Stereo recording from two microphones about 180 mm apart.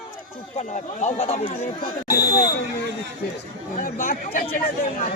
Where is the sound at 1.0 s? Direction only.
35° left (ahead or behind).